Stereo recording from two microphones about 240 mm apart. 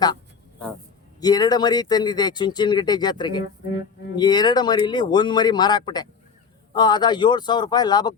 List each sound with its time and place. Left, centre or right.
1.2 s speech: centre